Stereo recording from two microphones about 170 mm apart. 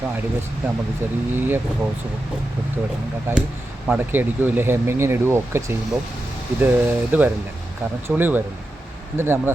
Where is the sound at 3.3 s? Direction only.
15° right (ahead or behind).